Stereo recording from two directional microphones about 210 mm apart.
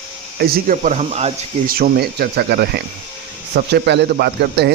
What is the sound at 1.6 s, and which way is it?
A man's voice, 45° right (ahead or behind).